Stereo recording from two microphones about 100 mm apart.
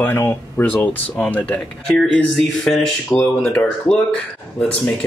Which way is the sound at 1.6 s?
5° left (ahead or behind).